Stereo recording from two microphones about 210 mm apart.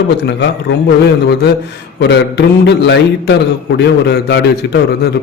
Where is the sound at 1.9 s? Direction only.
55° left (ahead or behind).